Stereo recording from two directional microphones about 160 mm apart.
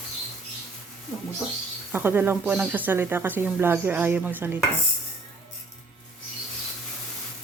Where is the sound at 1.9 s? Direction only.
10° right (ahead or behind).